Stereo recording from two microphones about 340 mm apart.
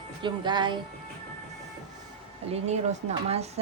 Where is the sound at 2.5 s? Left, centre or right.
Centre.